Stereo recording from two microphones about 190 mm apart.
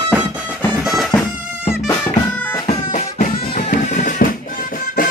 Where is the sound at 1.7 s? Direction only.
10° left (ahead or behind).